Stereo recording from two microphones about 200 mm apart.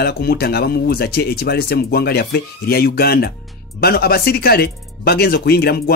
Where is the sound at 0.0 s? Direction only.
50° left (ahead or behind).